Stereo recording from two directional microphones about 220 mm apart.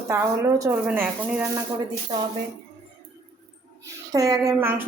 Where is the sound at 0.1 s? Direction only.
10° right (ahead or behind).